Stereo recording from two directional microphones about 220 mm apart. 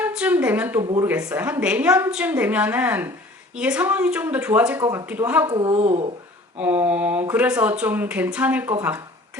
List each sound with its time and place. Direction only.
0.0 s a sound: 5° right (ahead or behind)
0.8 s speech: 20° right (ahead or behind)
1.0 s speech: 5° right (ahead or behind); by 6.1 s 30° right (ahead or behind)
6.6 s speech: 10° right (ahead or behind)